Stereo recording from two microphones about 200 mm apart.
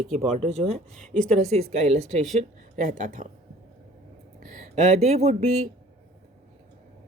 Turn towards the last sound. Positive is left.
turn(degrees=-35)  # may be behind; listen again after turning